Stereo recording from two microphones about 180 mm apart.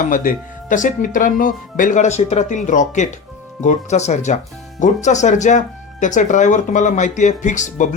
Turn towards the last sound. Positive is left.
turn(degrees=45)  # may be behind; listen again after turning